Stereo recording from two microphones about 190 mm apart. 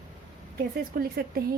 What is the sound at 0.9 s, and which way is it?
Speech, 55° right (ahead or behind).